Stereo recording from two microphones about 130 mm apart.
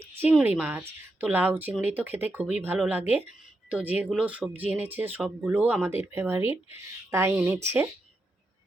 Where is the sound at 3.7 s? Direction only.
15° right (ahead or behind).